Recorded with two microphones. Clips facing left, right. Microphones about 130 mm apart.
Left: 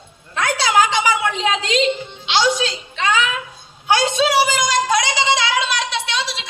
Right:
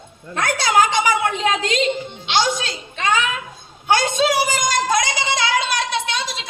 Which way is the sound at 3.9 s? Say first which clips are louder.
Left 1 dB; 50° right (ahead or behind).